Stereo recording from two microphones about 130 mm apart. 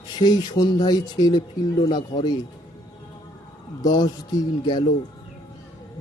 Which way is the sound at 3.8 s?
30° left (ahead or behind).